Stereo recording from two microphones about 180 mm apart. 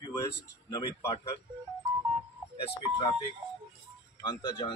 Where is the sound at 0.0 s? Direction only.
20° left (ahead or behind).